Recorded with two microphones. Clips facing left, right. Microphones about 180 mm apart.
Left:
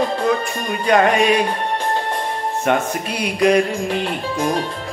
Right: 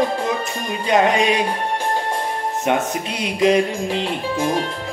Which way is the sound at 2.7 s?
20° right (ahead or behind).